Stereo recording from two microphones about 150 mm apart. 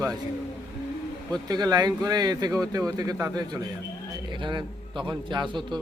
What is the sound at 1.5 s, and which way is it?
A man's voice, 25° right (ahead or behind).